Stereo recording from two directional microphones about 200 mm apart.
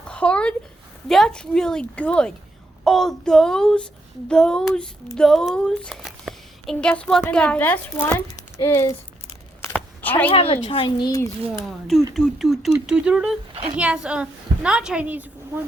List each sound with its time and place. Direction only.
0.1 s a sound: 5° left (ahead or behind)
1.0 s a woman's voice: centre (ahead or behind)
9.7 s a sound: 10° left (ahead or behind)
10.2 s speech: 25° left (ahead or behind)
12.1 s a woman's voice: centre (ahead or behind)
13.5 s a woman's voice: 30° right (ahead or behind)
13.7 s a woman's voice: 5° right (ahead or behind)